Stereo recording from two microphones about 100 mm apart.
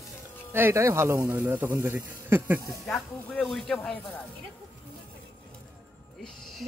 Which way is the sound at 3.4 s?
Centre (ahead or behind).